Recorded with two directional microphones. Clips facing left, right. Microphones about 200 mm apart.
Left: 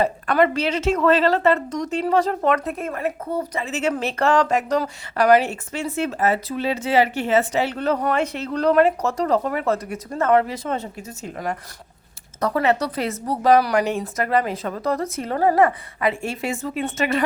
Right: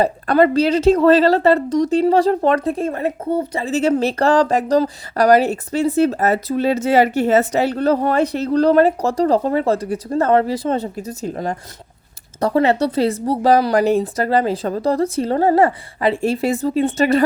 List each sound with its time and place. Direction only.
0.0 s a woman's voice: 35° right (ahead or behind)